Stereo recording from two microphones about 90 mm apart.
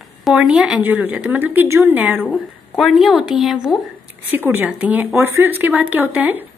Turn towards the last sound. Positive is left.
turn(degrees=-20)  # may be behind; listen again after turning